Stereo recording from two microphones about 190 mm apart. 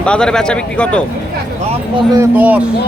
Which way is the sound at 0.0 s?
5° left (ahead or behind).